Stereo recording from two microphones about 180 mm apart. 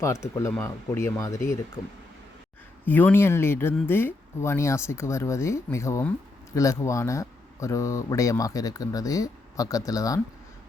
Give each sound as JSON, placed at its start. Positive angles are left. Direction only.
{"t": 0.0, "sound": "speech", "side_deg": 15}
{"t": 2.8, "sound": "speech", "side_deg": 10}